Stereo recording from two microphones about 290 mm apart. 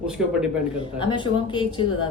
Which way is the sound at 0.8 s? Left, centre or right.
Centre.